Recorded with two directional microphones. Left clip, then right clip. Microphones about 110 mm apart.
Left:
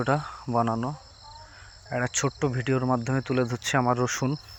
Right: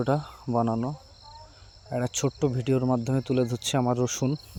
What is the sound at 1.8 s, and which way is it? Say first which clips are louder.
Speech: left 1 dB; 90° right.